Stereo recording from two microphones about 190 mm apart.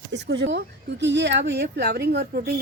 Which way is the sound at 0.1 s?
65° right (ahead or behind).